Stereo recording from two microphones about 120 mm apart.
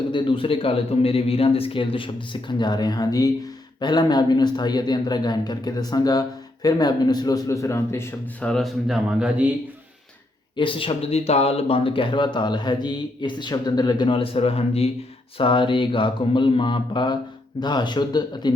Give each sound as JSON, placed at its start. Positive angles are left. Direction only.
{"t": 0.1, "sound": "speech", "side_deg": 45}
{"t": 8.4, "sound": "speech", "side_deg": 0}
{"t": 10.6, "sound": "speech", "side_deg": 45}
{"t": 15.4, "sound": "speech", "side_deg": 45}